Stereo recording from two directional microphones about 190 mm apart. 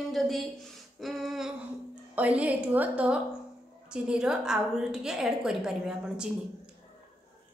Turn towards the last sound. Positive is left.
turn(degrees=0)  # may be behind; listen again after turning